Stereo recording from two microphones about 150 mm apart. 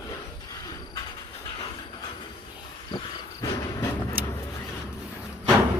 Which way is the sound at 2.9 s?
25° left (ahead or behind).